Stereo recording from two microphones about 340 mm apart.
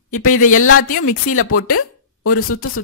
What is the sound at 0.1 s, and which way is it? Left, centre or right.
Speech, left.